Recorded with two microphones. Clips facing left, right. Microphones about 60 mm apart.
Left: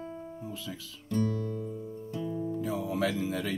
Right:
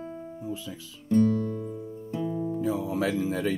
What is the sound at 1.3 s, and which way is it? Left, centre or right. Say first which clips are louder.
Music: right 5 dB; centre.